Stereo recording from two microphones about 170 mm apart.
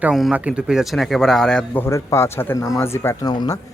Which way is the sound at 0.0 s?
5° right (ahead or behind).